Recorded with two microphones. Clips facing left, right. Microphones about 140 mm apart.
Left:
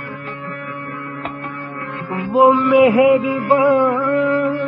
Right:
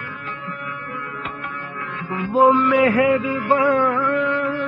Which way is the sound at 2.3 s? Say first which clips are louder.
Left 4 dB; 20° left (ahead or behind).